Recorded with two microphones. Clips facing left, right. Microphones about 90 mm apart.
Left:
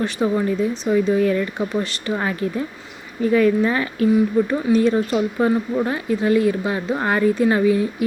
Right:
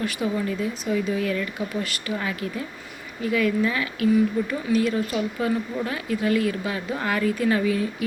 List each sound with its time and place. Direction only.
0.0 s speech: 35° left (ahead or behind)